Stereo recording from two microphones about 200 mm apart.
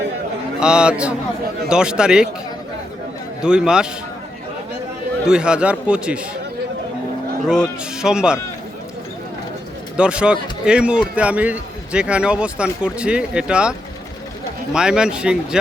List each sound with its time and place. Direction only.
0.6 s a man's voice: 5° right (ahead or behind)
3.4 s a man's voice: 5° right (ahead or behind)
5.2 s a man's voice: 5° right (ahead or behind)
7.4 s a man's voice: 5° right (ahead or behind)
10.0 s a man's voice: 5° right (ahead or behind)